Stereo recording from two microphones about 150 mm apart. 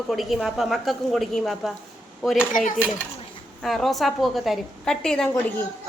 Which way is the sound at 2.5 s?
60° left (ahead or behind).